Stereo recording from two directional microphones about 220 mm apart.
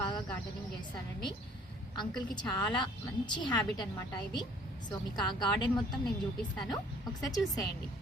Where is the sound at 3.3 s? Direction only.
20° left (ahead or behind).